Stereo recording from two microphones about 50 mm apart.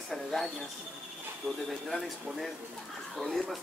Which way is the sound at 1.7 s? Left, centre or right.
Centre.